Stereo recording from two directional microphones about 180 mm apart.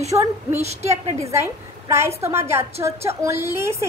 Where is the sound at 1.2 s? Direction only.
15° right (ahead or behind).